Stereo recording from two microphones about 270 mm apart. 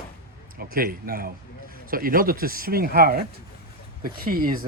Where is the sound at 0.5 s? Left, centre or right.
Right.